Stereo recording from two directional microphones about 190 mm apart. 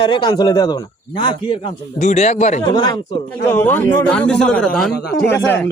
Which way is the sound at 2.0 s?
35° left (ahead or behind).